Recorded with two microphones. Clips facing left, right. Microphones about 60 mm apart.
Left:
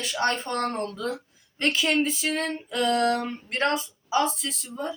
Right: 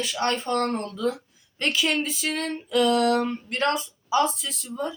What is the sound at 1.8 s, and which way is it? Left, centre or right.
Speech, centre.